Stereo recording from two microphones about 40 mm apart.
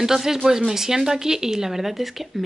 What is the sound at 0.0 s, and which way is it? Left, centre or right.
Speech, centre.